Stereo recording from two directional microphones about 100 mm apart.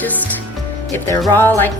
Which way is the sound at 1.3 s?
20° left (ahead or behind).